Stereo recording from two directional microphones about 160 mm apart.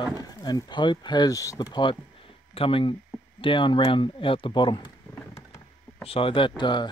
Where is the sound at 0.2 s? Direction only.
25° left (ahead or behind).